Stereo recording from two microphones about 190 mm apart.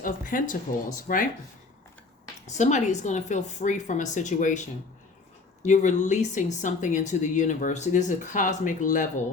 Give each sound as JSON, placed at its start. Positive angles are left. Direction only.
{"t": 0.0, "sound": "speech", "side_deg": 45}
{"t": 2.5, "sound": "speech", "side_deg": 40}
{"t": 5.6, "sound": "speech", "side_deg": 40}